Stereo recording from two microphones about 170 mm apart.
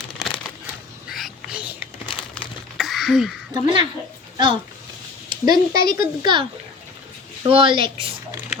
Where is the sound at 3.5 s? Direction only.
30° right (ahead or behind).